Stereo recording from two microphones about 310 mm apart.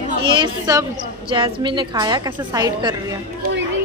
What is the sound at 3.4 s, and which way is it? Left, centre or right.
Music, right.